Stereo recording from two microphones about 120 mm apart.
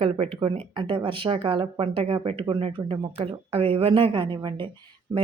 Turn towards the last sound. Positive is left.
turn(degrees=-35)  # may be behind; listen again after turning